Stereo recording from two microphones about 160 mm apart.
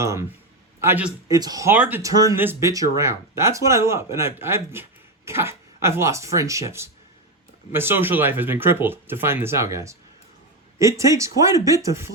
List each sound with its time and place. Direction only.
0.0 s speech: 20° right (ahead or behind)
1.3 s speech: 25° right (ahead or behind)
1.7 s speech: 10° right (ahead or behind)